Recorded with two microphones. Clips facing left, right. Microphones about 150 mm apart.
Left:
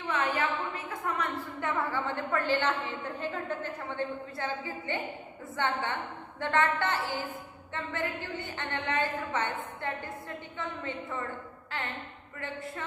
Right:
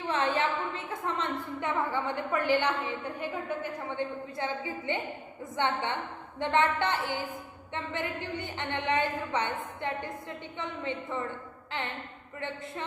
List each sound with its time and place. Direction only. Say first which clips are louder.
0.1 s a woman's voice: right 1 dB; 30° right (ahead or behind)